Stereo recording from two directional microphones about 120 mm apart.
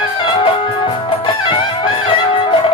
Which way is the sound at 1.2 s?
45° left (ahead or behind).